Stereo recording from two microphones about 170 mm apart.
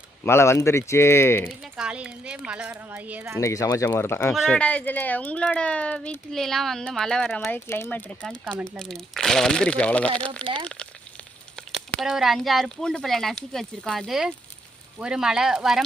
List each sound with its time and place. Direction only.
0.3 s speech: 15° left (ahead or behind)
1.5 s speech: 5° right (ahead or behind)
3.4 s speech: 20° left (ahead or behind); by 15.8 s 5° right (ahead or behind)